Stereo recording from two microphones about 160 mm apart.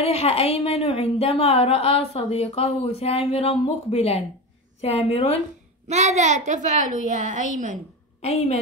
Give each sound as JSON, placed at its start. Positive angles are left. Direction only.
{"t": 0.0, "sound": "a woman's voice", "side_deg": 40}
{"t": 5.9, "sound": "a child's voice", "side_deg": -45}
{"t": 8.2, "sound": "a woman's voice", "side_deg": 40}